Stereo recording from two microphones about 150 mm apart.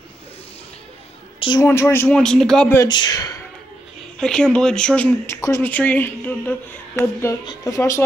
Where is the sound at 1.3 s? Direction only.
30° left (ahead or behind).